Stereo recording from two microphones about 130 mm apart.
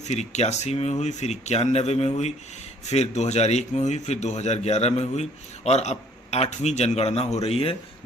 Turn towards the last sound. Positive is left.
turn(degrees=50)  # may be behind; listen again after turning